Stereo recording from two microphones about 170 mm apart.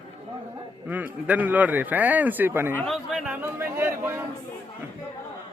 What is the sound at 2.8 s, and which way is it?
Chatter, centre (ahead or behind).